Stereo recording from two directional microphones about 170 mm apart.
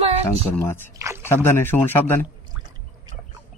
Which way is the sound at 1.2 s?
15° left (ahead or behind).